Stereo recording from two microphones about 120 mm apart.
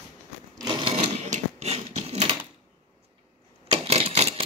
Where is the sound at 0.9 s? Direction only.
75° right (ahead or behind); by 2.3 s 60° right (ahead or behind).